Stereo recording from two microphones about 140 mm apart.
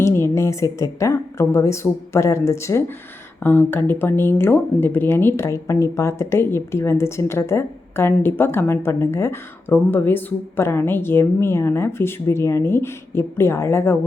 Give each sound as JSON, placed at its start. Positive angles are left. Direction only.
{"t": 0.0, "sound": "a woman's voice", "side_deg": 20}